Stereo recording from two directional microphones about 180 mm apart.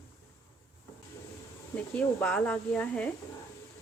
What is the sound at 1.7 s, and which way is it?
Speech, 5° left (ahead or behind).